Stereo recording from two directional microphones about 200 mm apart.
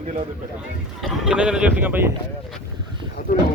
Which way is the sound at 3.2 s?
45° left (ahead or behind).